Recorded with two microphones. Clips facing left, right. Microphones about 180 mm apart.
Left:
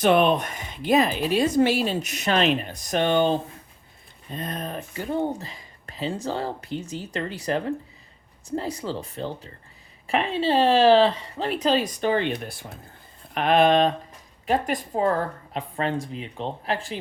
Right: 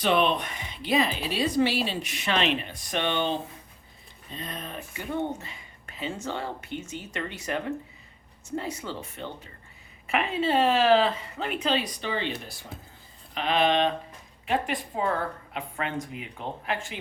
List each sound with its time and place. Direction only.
0.0 s speech: 50° left (ahead or behind)